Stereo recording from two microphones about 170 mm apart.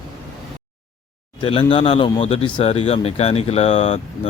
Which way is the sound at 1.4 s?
30° left (ahead or behind).